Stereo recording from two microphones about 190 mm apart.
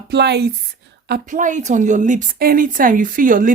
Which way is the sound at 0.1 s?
60° right (ahead or behind).